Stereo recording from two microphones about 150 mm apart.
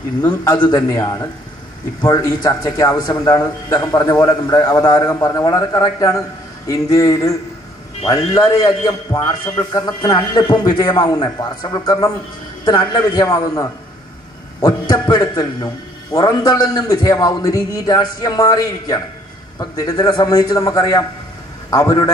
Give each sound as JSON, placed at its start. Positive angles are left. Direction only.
{"t": 0.3, "sound": "a man's voice", "side_deg": 30}